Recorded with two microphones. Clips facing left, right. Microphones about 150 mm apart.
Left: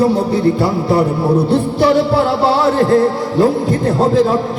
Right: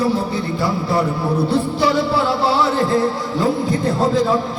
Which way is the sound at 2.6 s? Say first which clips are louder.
Left 6 dB; 55° left (ahead or behind).